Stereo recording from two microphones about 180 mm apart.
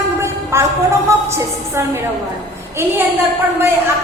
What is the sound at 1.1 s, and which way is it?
Music, 15° right (ahead or behind).